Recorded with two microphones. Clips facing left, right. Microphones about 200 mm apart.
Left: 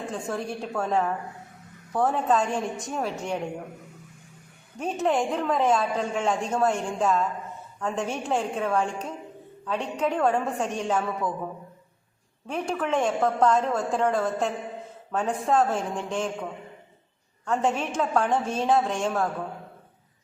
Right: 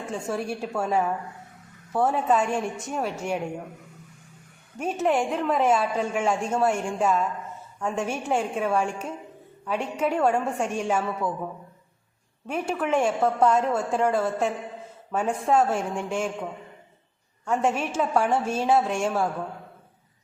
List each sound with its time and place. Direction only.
0.1 s a woman's voice: 5° right (ahead or behind)
4.8 s a woman's voice: 5° right (ahead or behind)
12.5 s a woman's voice: 5° right (ahead or behind)